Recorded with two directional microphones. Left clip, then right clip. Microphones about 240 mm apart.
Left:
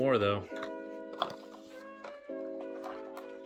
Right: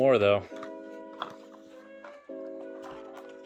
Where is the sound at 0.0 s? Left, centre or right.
Centre.